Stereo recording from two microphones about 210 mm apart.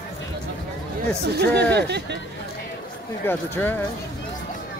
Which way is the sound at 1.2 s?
50° right (ahead or behind).